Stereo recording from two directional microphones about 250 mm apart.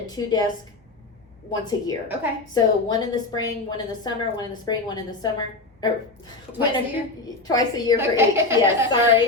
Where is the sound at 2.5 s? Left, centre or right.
Centre.